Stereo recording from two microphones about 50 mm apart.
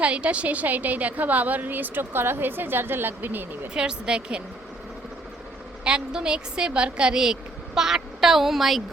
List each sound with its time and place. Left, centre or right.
0.0 s a woman's voice: right
3.8 s speech: centre
5.8 s a woman's voice: centre